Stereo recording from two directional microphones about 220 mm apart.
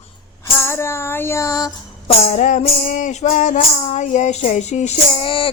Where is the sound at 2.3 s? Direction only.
35° left (ahead or behind).